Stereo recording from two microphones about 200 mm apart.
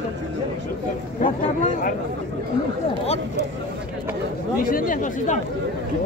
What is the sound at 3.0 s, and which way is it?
Speech, 30° left (ahead or behind).